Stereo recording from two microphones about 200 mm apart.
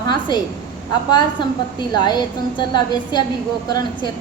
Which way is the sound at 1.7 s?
20° left (ahead or behind).